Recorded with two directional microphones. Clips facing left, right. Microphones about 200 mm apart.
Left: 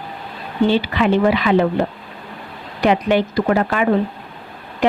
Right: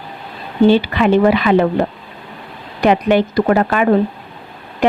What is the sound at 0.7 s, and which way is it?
Speech, 50° right (ahead or behind).